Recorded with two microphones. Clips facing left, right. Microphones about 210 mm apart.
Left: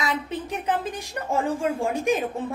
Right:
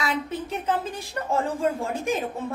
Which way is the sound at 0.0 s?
15° left (ahead or behind).